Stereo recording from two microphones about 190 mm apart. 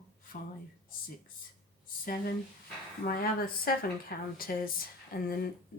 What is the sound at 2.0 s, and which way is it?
Speech, 45° left (ahead or behind).